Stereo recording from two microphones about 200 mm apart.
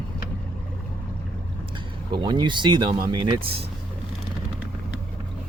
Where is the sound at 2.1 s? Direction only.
25° right (ahead or behind).